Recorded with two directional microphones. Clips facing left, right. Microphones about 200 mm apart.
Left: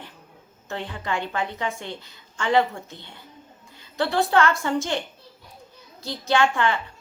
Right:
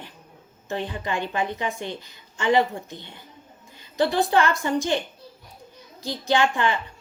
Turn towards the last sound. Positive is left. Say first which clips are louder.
# even
turn(degrees=-20)  # may be behind; listen again after turning